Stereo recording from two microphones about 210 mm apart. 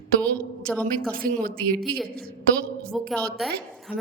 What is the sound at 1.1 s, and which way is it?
Speech, 45° right (ahead or behind).